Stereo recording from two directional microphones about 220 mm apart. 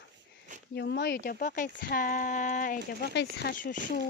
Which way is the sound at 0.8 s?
50° left (ahead or behind).